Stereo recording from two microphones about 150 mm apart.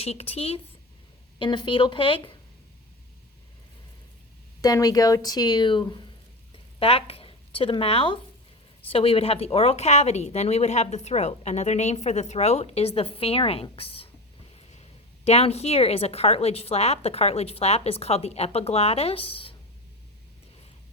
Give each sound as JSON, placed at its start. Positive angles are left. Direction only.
{"t": 0.0, "sound": "speech", "side_deg": 45}
{"t": 1.4, "sound": "speech", "side_deg": 30}
{"t": 4.6, "sound": "speech", "side_deg": 25}
{"t": 15.2, "sound": "speech", "side_deg": 45}